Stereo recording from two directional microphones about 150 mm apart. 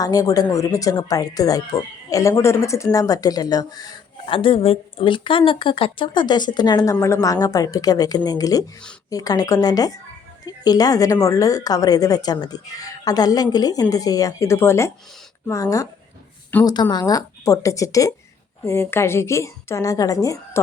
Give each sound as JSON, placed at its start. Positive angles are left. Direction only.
{"t": 0.0, "sound": "a woman's voice", "side_deg": 25}
{"t": 4.3, "sound": "a woman's voice", "side_deg": 35}
{"t": 16.5, "sound": "speech", "side_deg": 10}
{"t": 16.9, "sound": "a woman's voice", "side_deg": 25}